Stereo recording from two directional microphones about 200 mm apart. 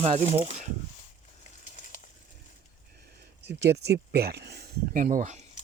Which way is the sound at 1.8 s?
40° left (ahead or behind).